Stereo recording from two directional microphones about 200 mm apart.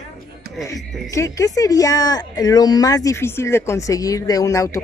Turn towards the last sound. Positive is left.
turn(degrees=15)  # may be behind; listen again after turning